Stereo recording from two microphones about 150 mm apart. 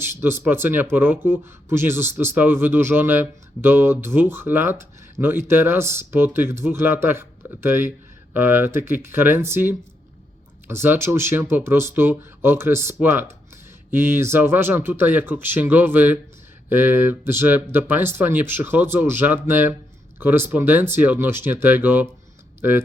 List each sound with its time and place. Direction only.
0.0 s speech: 15° right (ahead or behind)